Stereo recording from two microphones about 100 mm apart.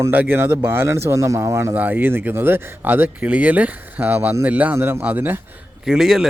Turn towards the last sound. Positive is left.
turn(degrees=-5)  # may be behind; listen again after turning